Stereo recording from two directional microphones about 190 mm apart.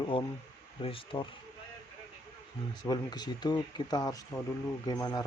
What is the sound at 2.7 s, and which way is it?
Speech, 20° left (ahead or behind).